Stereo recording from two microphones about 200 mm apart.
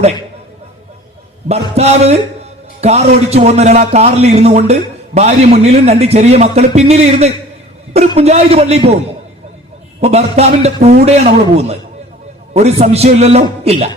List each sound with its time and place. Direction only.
1.5 s a man's voice: 30° right (ahead or behind)
10.0 s a man's voice: 30° right (ahead or behind)